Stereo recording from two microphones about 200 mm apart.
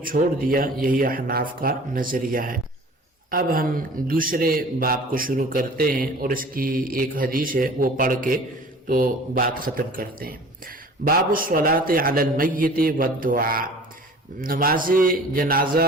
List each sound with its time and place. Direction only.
0.0 s a man's voice: 45° right (ahead or behind)